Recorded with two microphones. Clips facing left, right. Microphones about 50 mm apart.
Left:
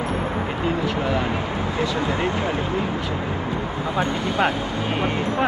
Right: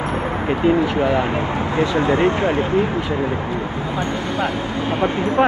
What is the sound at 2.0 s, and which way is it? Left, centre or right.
Speech, right.